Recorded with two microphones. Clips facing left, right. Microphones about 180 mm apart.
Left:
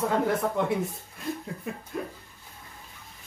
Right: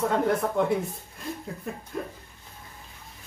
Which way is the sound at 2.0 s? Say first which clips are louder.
Even; 5° left (ahead or behind).